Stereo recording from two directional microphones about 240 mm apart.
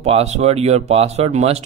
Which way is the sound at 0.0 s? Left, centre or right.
Right.